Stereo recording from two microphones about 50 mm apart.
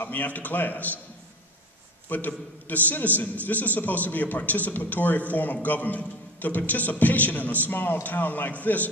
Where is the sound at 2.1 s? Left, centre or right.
Left.